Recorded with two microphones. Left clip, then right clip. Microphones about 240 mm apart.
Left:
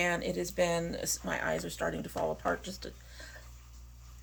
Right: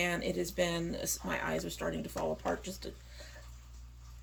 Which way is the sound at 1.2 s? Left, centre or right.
Left.